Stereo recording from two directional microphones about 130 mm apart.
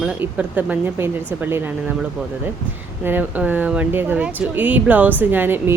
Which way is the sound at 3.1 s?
15° right (ahead or behind).